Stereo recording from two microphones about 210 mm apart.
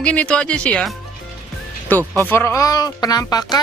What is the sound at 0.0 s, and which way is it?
Speech, 5° left (ahead or behind).